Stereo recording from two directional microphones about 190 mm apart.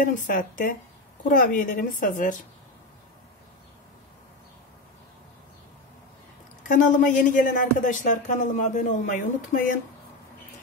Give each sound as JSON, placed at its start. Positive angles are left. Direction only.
{"t": 0.0, "sound": "speech", "side_deg": 45}
{"t": 6.6, "sound": "speech", "side_deg": 45}